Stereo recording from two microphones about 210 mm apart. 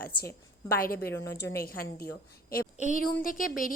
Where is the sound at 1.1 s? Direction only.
10° left (ahead or behind).